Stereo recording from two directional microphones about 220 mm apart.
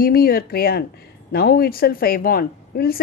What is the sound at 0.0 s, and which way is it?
A woman's voice, 45° left (ahead or behind).